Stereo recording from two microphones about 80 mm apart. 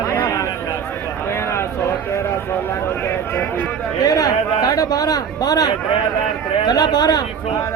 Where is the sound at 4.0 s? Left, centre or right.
Left.